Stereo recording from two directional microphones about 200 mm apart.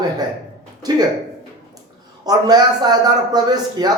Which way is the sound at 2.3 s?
20° right (ahead or behind).